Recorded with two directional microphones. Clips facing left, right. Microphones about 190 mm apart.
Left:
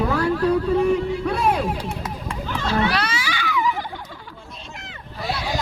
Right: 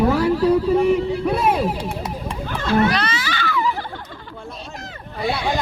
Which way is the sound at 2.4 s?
50° right (ahead or behind).